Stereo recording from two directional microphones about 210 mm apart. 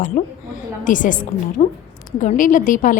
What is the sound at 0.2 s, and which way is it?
A woman's voice, 35° left (ahead or behind).